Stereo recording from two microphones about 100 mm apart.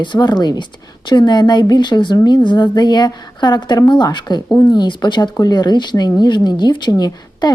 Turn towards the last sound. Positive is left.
turn(degrees=40)  # may be behind; listen again after turning